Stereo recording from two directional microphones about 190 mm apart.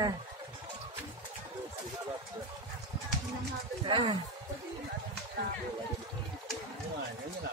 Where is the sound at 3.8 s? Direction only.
25° right (ahead or behind).